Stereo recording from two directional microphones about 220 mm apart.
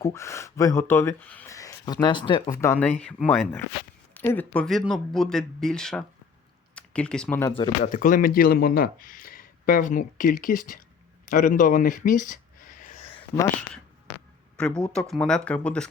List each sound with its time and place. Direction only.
0.0 s speech: 15° left (ahead or behind)
7.9 s speech: 40° left (ahead or behind)
11.3 s a sound: 35° left (ahead or behind)
14.5 s speech: 5° left (ahead or behind)